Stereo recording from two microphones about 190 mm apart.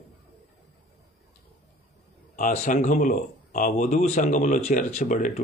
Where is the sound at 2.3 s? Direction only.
40° left (ahead or behind).